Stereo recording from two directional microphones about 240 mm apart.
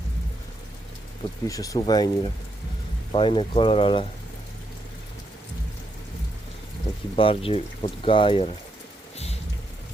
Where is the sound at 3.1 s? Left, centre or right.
Left.